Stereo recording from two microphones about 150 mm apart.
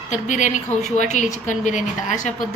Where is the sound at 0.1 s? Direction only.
55° left (ahead or behind).